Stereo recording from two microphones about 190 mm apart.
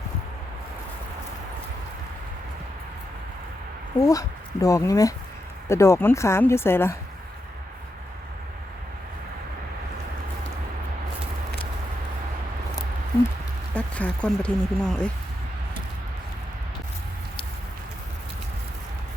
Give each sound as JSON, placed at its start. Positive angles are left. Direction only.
{"t": 4.0, "sound": "speech", "side_deg": 20}
{"t": 13.7, "sound": "speech", "side_deg": 5}